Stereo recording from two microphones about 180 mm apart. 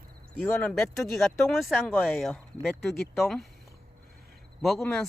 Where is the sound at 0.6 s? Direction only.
Centre (ahead or behind).